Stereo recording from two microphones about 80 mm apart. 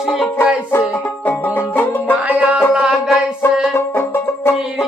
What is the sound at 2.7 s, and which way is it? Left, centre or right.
Music, centre.